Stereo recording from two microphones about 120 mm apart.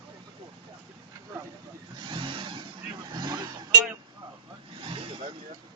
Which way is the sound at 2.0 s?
45° right (ahead or behind).